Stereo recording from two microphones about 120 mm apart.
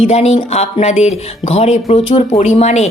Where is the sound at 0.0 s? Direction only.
65° left (ahead or behind).